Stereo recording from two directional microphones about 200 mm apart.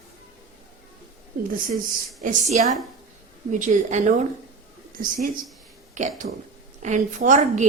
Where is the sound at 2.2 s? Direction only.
40° right (ahead or behind).